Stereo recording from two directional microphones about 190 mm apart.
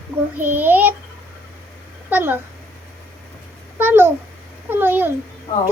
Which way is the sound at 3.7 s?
10° right (ahead or behind).